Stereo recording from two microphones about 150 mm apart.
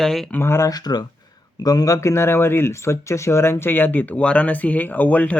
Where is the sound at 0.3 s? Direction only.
15° left (ahead or behind).